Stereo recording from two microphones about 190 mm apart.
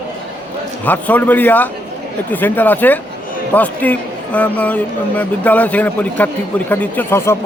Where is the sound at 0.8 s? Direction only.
10° left (ahead or behind).